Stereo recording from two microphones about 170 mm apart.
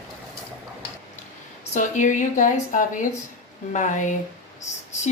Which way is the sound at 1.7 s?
45° left (ahead or behind).